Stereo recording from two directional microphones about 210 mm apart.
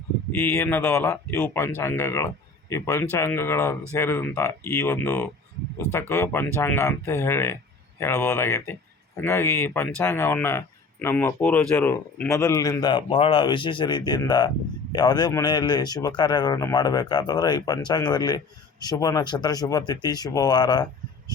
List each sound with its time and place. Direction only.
0.4 s a man's voice: 10° left (ahead or behind)